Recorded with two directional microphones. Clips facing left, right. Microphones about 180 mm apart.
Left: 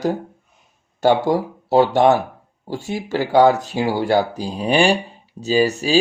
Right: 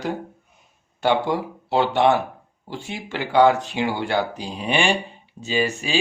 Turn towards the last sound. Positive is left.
turn(degrees=35)  # may be behind; listen again after turning